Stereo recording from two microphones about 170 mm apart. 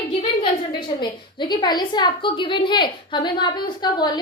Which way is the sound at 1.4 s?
25° left (ahead or behind).